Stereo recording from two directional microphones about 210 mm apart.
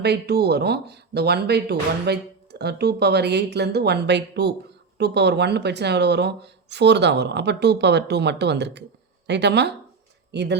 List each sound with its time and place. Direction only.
0.0 s speech: 50° right (ahead or behind)